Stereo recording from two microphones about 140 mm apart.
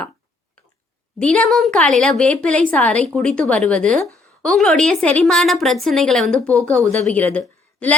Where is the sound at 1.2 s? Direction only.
5° left (ahead or behind).